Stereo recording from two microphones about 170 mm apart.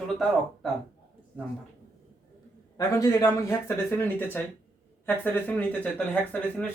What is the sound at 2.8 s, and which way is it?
Speech, 20° left (ahead or behind).